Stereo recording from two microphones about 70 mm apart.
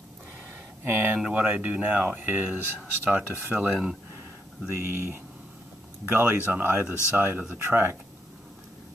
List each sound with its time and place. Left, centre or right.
0.8 s speech: right
1.1 s speech: centre
4.6 s speech: right